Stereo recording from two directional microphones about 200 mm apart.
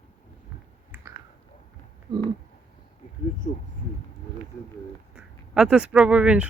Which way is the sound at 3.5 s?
40° left (ahead or behind).